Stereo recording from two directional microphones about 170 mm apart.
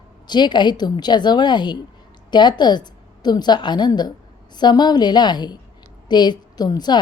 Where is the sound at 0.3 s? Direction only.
25° left (ahead or behind).